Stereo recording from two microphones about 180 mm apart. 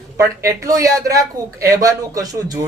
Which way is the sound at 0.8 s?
20° right (ahead or behind).